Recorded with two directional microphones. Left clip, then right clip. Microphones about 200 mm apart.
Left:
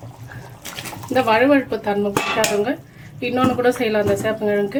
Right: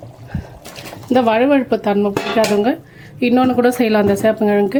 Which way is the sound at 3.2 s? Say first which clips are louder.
Right 5 dB; 45° right (ahead or behind).